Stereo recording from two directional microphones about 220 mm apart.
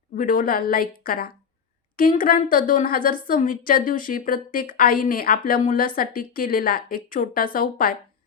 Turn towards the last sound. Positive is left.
turn(degrees=40)  # may be behind; listen again after turning